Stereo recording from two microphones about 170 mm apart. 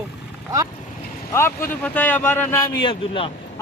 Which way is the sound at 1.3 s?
15° left (ahead or behind).